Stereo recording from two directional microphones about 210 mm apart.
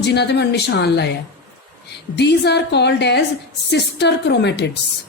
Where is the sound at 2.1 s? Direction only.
55° left (ahead or behind).